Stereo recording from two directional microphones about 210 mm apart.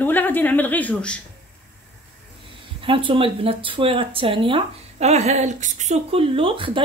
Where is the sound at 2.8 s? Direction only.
25° right (ahead or behind).